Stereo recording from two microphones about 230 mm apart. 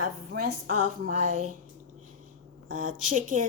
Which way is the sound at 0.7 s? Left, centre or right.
Right.